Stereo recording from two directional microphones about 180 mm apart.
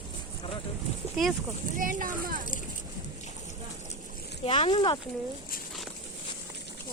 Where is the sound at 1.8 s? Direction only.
50° right (ahead or behind).